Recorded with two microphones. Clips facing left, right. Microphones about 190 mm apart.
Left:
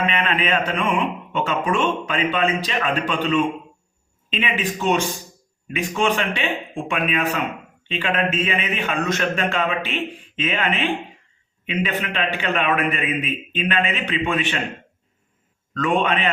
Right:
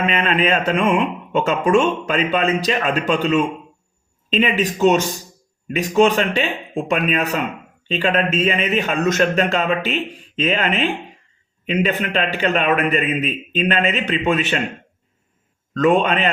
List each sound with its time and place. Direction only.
0.1 s speech: 40° right (ahead or behind)
15.7 s speech: 40° right (ahead or behind)